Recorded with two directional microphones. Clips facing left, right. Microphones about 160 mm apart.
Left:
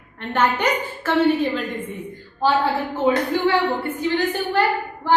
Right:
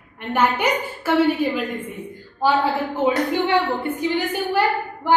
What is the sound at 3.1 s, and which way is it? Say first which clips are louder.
A woman's voice: left 2 dB; 20° right (ahead or behind).